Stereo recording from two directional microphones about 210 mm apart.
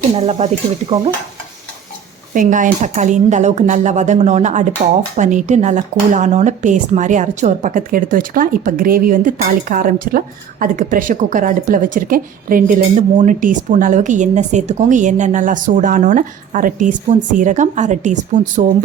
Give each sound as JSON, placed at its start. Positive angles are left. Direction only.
{"t": 0.2, "sound": "speech", "side_deg": -30}
{"t": 2.3, "sound": "speech", "side_deg": -40}